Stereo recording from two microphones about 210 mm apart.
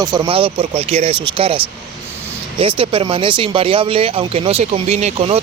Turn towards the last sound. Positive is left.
turn(degrees=-30)  # may be behind; listen again after turning